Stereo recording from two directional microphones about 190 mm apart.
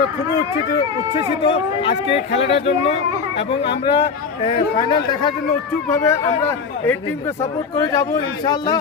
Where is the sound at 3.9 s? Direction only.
25° left (ahead or behind).